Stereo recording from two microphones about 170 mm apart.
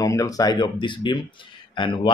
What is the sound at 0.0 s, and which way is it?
Speech, 20° left (ahead or behind).